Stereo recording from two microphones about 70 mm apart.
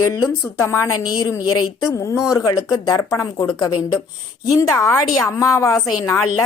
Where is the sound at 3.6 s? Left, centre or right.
Left.